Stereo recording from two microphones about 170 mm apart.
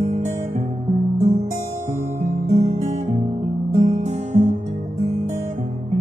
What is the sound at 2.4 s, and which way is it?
Music, 40° right (ahead or behind).